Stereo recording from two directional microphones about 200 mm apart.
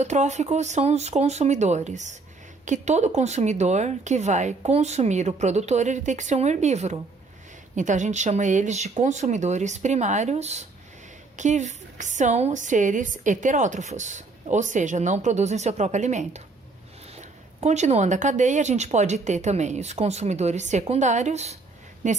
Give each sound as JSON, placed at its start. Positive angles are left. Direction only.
{"t": 0.0, "sound": "a woman's voice", "side_deg": -35}